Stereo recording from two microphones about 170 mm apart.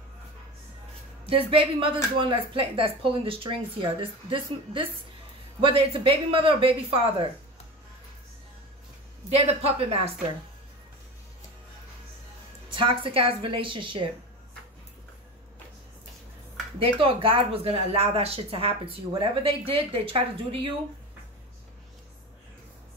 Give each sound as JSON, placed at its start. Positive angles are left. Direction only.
{"t": 1.5, "sound": "speech", "side_deg": -30}
{"t": 9.3, "sound": "speech", "side_deg": -35}
{"t": 12.7, "sound": "speech", "side_deg": -30}
{"t": 16.8, "sound": "speech", "side_deg": -30}